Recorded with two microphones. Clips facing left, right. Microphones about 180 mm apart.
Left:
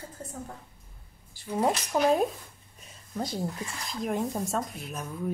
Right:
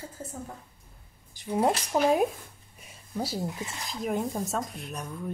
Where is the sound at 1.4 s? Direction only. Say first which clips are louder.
Right 1 dB; 15° right (ahead or behind).